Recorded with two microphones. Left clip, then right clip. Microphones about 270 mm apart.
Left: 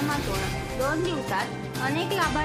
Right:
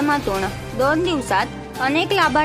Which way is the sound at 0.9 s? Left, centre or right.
Right.